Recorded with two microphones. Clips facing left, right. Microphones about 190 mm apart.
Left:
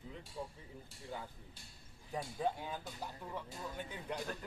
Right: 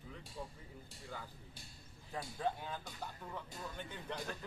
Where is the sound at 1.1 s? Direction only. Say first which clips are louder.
Left 3 dB; 20° left (ahead or behind).